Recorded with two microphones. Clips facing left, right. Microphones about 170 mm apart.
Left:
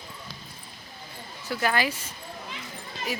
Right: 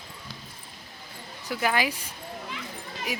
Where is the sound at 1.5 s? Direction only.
10° right (ahead or behind).